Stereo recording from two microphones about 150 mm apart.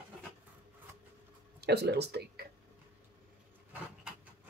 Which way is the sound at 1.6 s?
90° right.